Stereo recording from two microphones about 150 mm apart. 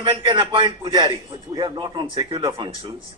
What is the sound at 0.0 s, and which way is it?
A man's voice, 35° right (ahead or behind).